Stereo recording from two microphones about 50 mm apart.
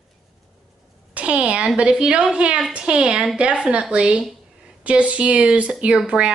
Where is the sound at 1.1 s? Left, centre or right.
Right.